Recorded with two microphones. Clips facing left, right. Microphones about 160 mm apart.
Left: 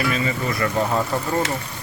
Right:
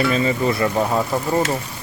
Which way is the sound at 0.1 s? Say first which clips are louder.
Right 5 dB; 30° right (ahead or behind).